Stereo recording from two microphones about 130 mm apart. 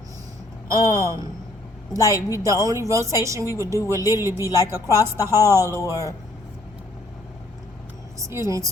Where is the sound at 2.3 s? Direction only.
25° right (ahead or behind).